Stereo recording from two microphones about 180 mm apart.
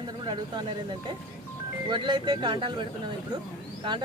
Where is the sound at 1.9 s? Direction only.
25° right (ahead or behind).